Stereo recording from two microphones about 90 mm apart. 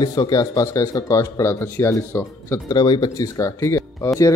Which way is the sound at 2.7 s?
55° left (ahead or behind).